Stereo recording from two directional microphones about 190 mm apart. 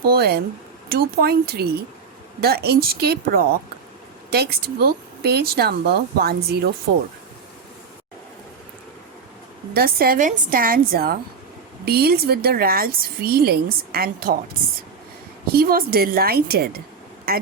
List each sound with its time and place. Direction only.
0.1 s speech: 55° right (ahead or behind)
9.7 s speech: 50° right (ahead or behind)
15.5 s speech: 50° right (ahead or behind)